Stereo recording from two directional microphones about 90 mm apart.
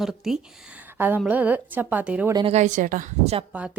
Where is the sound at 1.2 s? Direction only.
15° right (ahead or behind).